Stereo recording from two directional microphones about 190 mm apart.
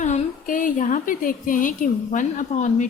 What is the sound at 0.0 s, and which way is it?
A woman's voice, 40° left (ahead or behind).